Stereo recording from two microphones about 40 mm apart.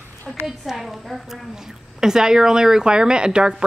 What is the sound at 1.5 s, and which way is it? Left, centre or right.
Speech, centre.